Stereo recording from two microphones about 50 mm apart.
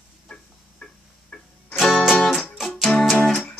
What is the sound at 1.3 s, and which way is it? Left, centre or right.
Music, left.